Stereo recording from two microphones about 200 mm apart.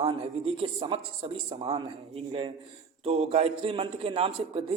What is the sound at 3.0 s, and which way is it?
A man's voice, 30° right (ahead or behind).